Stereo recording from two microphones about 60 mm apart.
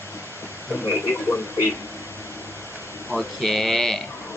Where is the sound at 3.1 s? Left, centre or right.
Centre.